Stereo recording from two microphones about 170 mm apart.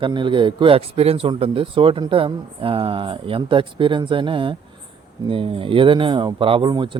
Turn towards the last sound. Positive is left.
turn(degrees=-25)  # may be behind; listen again after turning